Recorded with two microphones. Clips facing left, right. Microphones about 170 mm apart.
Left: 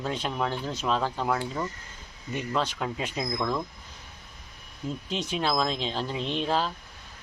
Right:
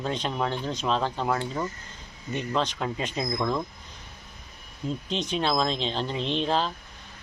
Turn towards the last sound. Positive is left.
turn(degrees=5)  # may be behind; listen again after turning